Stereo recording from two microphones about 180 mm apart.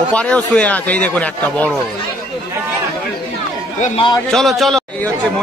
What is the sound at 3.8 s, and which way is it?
Speech, 40° left (ahead or behind).